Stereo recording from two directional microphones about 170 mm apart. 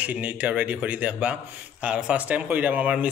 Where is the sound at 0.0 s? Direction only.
10° right (ahead or behind).